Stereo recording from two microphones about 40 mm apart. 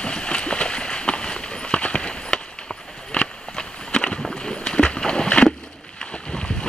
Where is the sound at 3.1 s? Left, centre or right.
Left.